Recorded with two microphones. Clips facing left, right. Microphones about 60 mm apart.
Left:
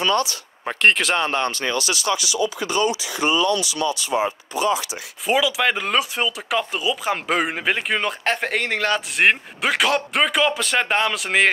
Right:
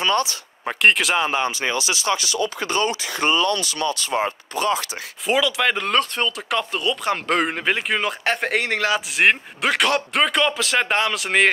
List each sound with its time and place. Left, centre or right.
0.0 s speech: right
0.7 s speech: centre; by 2.0 s right
2.0 s speech: right
5.2 s speech: centre